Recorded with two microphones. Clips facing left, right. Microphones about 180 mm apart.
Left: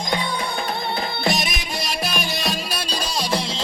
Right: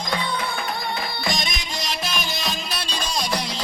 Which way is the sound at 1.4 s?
5° left (ahead or behind).